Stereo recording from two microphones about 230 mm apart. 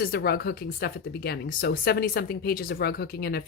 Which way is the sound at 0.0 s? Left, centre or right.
Left.